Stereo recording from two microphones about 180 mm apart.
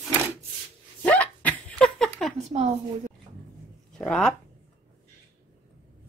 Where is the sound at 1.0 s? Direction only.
5° left (ahead or behind).